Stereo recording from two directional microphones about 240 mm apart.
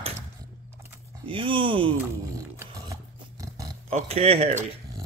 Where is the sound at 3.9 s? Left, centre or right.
Right.